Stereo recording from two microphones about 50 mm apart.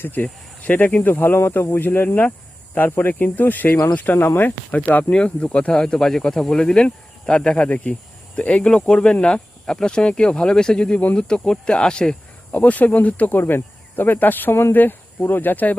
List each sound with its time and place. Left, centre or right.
0.0 s speech: left
1.4 s speech: left
5.1 s speech: left
12.5 s speech: left
13.4 s speech: left